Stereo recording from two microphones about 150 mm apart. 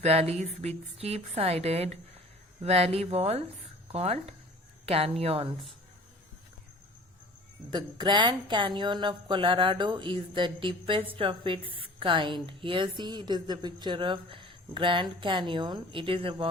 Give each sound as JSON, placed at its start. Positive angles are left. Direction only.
{"t": 0.0, "sound": "a woman's voice", "side_deg": -45}
{"t": 7.7, "sound": "a woman's voice", "side_deg": -30}